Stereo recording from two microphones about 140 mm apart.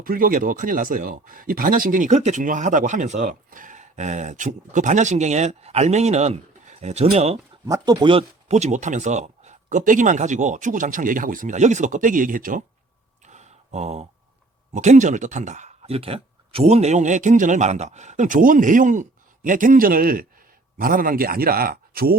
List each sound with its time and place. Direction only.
0.0 s speech: 90° right; by 7.3 s 50° right (ahead or behind)
7.7 s speech: 25° right (ahead or behind)
8.4 s speech: 55° right (ahead or behind); by 12.6 s 75° right (ahead or behind)
13.2 s a sound: 55° right (ahead or behind)
14.7 s speech: 55° right (ahead or behind); by 22.2 s 90° right